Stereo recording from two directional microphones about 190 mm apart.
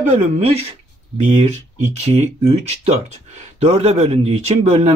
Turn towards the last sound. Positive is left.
turn(degrees=-35)  # may be behind; listen again after turning